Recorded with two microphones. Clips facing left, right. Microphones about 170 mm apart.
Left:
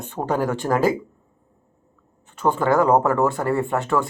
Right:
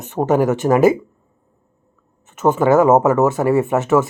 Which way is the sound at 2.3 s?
20° right (ahead or behind).